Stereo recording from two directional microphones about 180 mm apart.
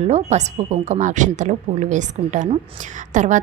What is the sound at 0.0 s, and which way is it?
A woman's voice, 40° right (ahead or behind).